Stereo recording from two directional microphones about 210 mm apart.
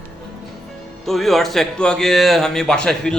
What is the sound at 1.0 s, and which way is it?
Speech, centre (ahead or behind).